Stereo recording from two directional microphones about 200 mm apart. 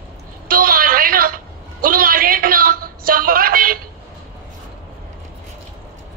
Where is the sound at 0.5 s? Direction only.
45° right (ahead or behind).